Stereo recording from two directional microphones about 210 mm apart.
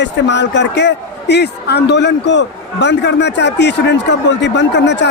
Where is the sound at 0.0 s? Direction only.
55° left (ahead or behind).